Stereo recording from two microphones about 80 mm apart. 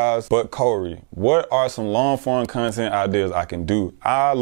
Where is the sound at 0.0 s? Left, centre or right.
Centre.